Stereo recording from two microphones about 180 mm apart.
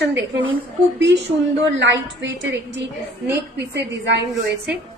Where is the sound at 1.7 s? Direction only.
90° right.